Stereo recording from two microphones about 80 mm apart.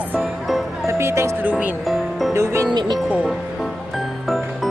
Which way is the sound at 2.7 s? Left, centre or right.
Right.